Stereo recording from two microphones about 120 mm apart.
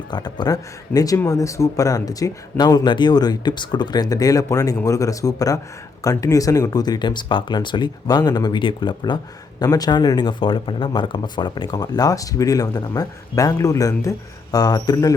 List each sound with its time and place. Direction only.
0.1 s speech: 35° left (ahead or behind)